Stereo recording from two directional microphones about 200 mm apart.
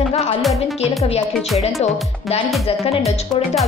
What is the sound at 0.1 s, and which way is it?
Music, 30° left (ahead or behind).